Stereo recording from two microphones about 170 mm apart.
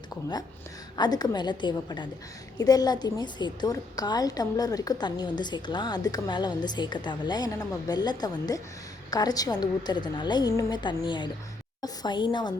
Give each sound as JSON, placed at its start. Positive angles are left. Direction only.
{"t": 0.9, "sound": "a woman's voice", "side_deg": 25}